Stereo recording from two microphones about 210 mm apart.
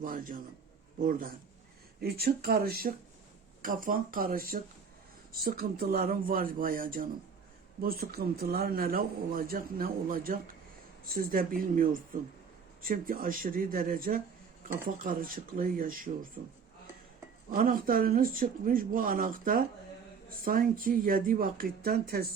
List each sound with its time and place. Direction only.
0.0 s speech: 40° right (ahead or behind)
17.5 s speech: 40° right (ahead or behind)